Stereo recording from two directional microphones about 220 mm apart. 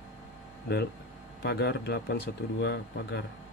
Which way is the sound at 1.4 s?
50° left (ahead or behind).